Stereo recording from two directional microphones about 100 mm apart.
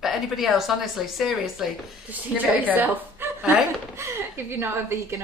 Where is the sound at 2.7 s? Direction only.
20° right (ahead or behind).